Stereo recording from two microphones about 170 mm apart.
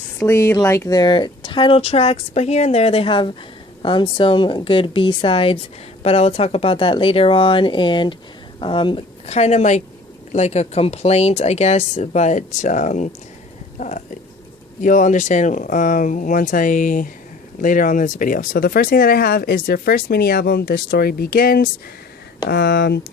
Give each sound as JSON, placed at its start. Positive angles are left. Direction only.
{"t": 0.3, "sound": "speech", "side_deg": 15}
{"t": 13.7, "sound": "a sound", "side_deg": 45}
{"t": 14.8, "sound": "speech", "side_deg": 50}
{"t": 22.4, "sound": "speech", "side_deg": 70}